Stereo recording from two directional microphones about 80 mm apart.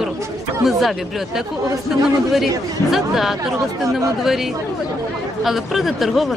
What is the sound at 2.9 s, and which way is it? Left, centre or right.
Speech, centre.